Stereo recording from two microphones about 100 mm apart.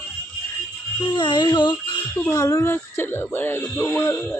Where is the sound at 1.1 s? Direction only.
50° left (ahead or behind).